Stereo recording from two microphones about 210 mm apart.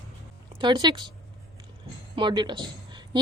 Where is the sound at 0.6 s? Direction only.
20° right (ahead or behind).